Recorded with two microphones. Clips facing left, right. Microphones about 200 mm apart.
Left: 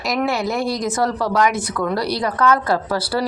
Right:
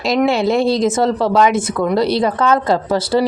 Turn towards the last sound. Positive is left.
turn(degrees=-25)  # may be behind; listen again after turning